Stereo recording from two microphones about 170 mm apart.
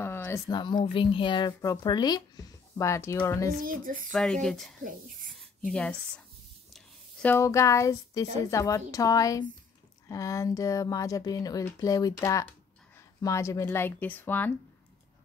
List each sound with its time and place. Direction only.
0.0 s speech: 15° left (ahead or behind)
3.6 s speech: 55° right (ahead or behind)
4.1 s a woman's voice: 5° left (ahead or behind)